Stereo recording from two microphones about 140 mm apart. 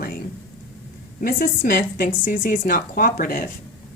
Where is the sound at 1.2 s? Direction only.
90° left.